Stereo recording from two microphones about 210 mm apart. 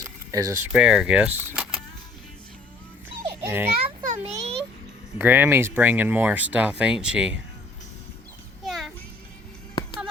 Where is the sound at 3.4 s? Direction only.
10° right (ahead or behind).